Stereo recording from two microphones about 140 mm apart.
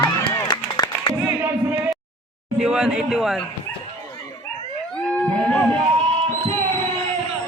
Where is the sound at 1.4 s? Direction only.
15° right (ahead or behind).